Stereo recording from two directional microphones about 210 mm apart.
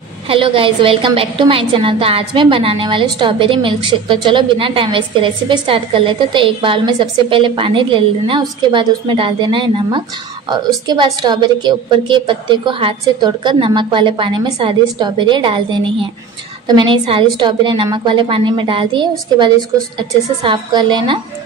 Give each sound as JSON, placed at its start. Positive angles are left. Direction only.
{"t": 0.3, "sound": "a woman's voice", "side_deg": -25}